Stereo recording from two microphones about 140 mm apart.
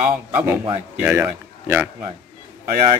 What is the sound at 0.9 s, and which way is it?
A man's voice, 10° right (ahead or behind).